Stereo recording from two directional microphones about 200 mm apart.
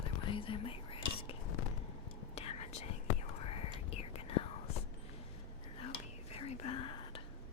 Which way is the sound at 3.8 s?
30° left (ahead or behind).